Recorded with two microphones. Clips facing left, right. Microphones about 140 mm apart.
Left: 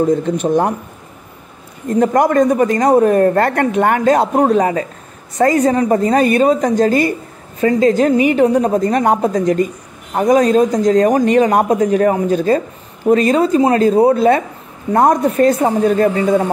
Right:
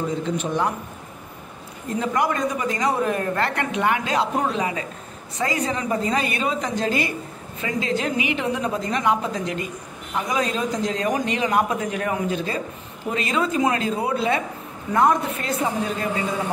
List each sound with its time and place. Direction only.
0.0 s speech: 45° left (ahead or behind)
2.0 s speech: 50° left (ahead or behind)